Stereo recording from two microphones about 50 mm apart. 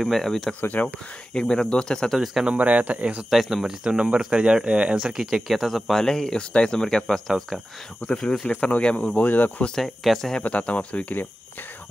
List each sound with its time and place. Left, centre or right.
0.0 s speech: centre
0.6 s speech: left
1.3 s speech: centre
2.1 s speech: centre
2.4 s speech: right
3.3 s speech: centre
3.8 s speech: centre
8.5 s speech: left
9.8 s speech: centre
10.4 s speech: left